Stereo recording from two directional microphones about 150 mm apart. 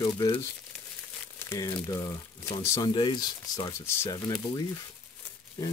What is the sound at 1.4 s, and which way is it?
Speech, 20° left (ahead or behind).